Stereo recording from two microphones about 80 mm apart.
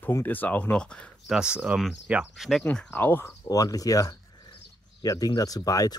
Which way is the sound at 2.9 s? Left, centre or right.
Left.